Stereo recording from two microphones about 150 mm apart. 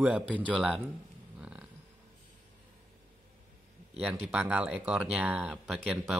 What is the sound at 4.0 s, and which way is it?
Speech, 10° right (ahead or behind).